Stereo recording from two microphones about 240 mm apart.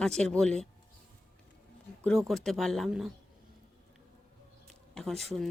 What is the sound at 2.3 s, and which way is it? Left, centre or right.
Speech, centre.